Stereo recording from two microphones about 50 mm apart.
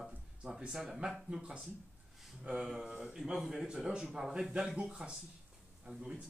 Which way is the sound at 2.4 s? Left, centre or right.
Centre.